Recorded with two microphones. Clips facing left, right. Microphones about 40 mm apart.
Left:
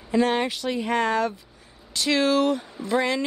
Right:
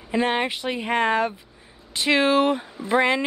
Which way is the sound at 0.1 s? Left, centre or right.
Right.